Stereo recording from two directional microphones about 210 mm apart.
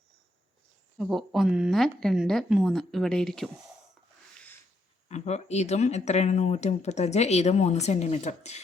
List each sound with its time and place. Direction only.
0.9 s a woman's voice: centre (ahead or behind)
5.0 s speech: 30° left (ahead or behind)